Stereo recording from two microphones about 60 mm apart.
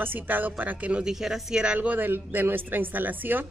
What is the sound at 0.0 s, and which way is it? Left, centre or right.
Speech, right.